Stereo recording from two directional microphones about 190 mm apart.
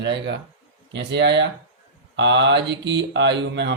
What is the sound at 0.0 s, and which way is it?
Mantra, 65° right (ahead or behind).